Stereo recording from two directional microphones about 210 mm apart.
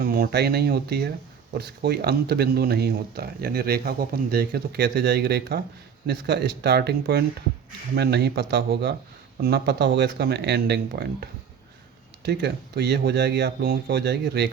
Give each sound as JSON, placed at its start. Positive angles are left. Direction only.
{"t": 0.0, "sound": "speech", "side_deg": -45}